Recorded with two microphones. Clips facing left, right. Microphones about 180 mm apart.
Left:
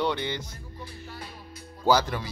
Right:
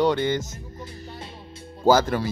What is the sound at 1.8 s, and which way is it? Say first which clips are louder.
Speech: right 5 dB; 50° right (ahead or behind).